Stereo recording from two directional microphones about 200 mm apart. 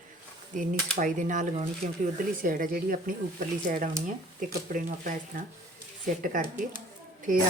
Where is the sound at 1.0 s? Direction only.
40° right (ahead or behind).